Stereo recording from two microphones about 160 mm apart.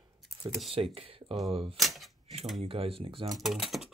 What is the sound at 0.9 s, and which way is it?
Speech, 35° right (ahead or behind).